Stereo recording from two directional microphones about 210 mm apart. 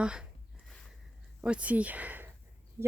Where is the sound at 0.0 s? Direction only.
5° right (ahead or behind).